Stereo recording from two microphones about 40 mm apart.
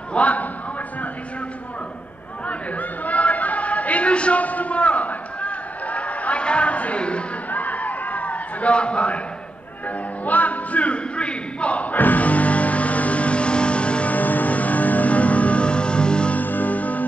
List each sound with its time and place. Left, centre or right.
0.1 s a man's voice: left
2.4 s a sound: left
7.5 s a sound: left
9.8 s music: left
14.1 s music: left
16.3 s music: left